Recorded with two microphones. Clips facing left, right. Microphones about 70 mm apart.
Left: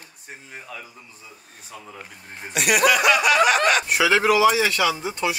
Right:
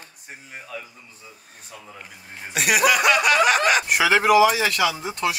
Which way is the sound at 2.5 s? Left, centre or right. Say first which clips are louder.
Even; centre.